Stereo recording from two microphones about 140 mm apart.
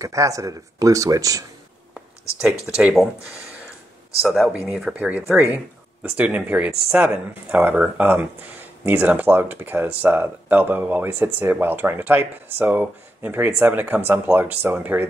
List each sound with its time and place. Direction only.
0.0 s speech: 25° right (ahead or behind)
2.6 s speech: 5° right (ahead or behind)